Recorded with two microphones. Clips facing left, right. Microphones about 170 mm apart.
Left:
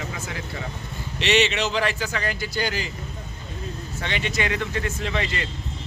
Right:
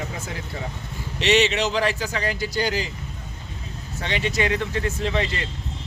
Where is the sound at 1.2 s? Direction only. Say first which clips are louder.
Right 2 dB; 40° right (ahead or behind).